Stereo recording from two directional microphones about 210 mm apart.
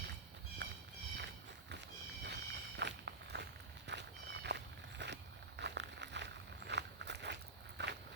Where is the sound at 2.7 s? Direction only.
55° right (ahead or behind).